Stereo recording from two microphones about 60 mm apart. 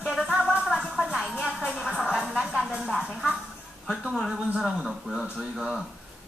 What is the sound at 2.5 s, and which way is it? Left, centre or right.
Music, centre.